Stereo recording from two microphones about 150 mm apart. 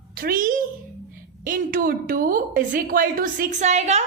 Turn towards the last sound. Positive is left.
turn(degrees=-50)  # may be behind; listen again after turning